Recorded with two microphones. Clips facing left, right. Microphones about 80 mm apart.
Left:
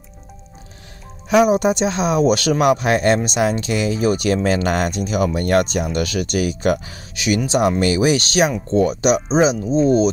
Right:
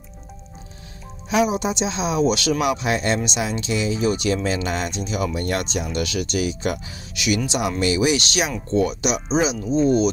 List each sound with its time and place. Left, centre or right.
1.5 s speech: left
7.2 s speech: left